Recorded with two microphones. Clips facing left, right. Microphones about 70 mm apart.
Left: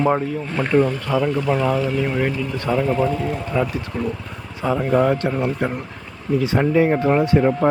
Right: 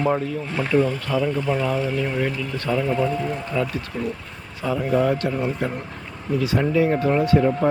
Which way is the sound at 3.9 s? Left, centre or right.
Left.